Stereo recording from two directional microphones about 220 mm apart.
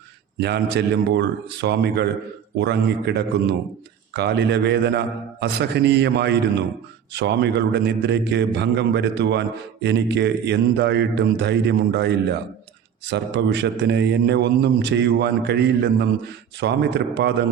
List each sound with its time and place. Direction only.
0.3 s a man's voice: 50° right (ahead or behind)